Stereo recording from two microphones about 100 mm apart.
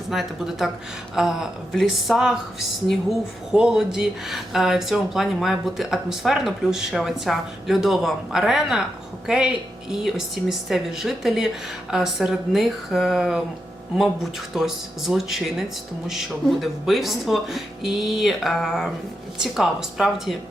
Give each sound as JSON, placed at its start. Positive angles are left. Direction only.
{"t": 0.1, "sound": "speech", "side_deg": -5}
{"t": 14.5, "sound": "speech", "side_deg": -5}